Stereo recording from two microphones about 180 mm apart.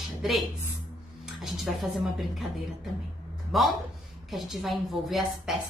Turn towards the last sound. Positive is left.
turn(degrees=0)  # may be behind; listen again after turning